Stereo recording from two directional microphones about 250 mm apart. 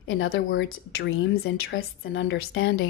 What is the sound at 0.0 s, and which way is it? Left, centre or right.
A woman's voice, left.